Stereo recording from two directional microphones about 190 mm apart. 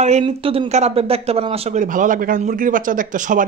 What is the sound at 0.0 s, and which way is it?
Speech, 35° right (ahead or behind).